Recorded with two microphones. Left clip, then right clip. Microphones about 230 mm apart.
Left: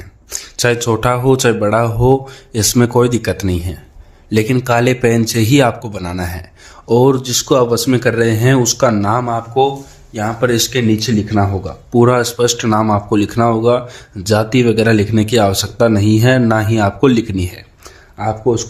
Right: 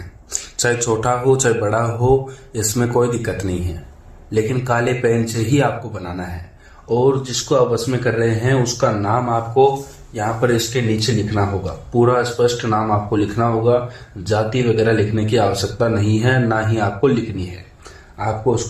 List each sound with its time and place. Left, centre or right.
0.3 s speech: left